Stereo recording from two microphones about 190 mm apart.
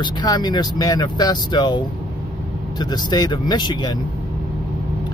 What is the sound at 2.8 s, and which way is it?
Speech, 20° left (ahead or behind).